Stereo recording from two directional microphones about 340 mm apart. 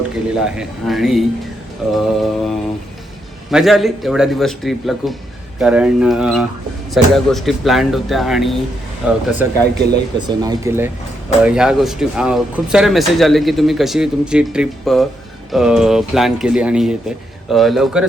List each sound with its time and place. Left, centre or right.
0.3 s speech: centre
9.7 s speech: right
10.2 s speech: centre